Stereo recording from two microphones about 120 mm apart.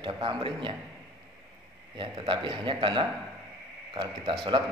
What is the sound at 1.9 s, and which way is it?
A man's voice, 40° right (ahead or behind).